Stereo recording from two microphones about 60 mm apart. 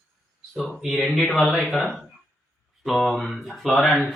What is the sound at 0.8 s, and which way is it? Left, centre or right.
Speech, centre.